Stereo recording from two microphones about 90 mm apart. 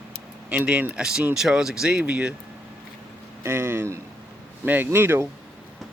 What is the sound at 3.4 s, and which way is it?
Speech, 25° right (ahead or behind).